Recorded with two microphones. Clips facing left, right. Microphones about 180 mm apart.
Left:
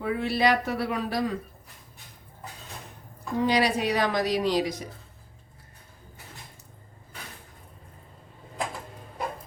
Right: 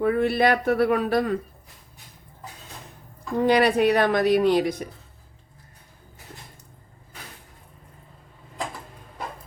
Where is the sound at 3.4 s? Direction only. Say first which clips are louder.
Right 6 dB; 55° right (ahead or behind).